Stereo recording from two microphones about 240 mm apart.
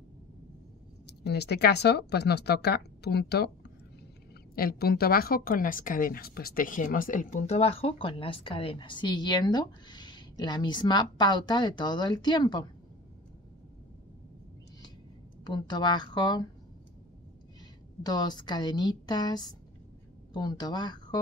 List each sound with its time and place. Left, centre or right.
1.0 s a woman's voice: left; by 12.6 s centre
15.4 s a woman's voice: centre
18.0 s a woman's voice: centre